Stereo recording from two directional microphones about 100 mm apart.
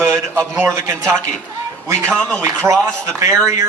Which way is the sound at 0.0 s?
25° right (ahead or behind).